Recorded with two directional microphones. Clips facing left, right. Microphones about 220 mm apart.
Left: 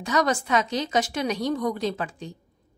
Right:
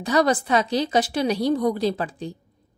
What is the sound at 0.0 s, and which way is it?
A woman's voice, 35° right (ahead or behind).